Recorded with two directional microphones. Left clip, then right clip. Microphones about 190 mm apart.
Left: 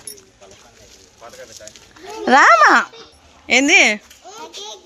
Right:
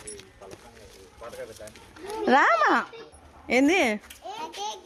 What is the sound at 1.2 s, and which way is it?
Speech, 45° right (ahead or behind).